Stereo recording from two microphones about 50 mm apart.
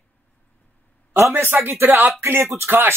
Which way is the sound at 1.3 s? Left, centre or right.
Right.